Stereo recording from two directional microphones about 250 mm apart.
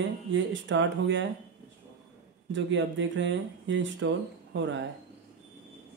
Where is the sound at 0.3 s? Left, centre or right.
Right.